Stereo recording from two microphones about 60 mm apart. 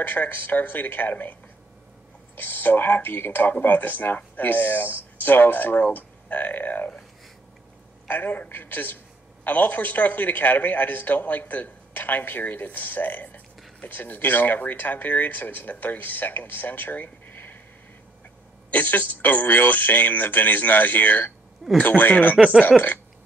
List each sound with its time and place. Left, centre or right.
0.0 s speech: left
2.3 s speech: left
8.1 s a man's voice: left
18.7 s a man's voice: left